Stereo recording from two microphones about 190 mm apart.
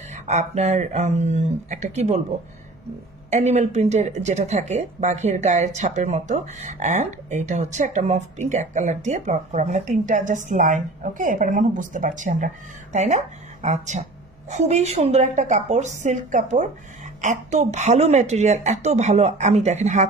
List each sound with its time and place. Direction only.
0.1 s speech: 35° right (ahead or behind)
3.3 s speech: 35° right (ahead or behind)